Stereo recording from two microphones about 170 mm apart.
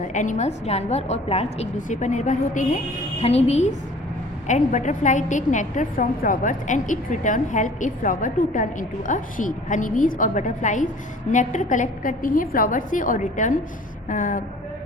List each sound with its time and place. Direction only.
0.1 s a woman's voice: 45° left (ahead or behind)